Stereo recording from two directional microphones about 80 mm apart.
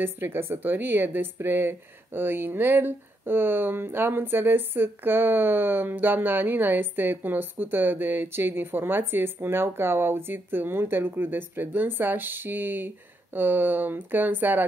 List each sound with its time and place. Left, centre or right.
0.0 s a woman's voice: right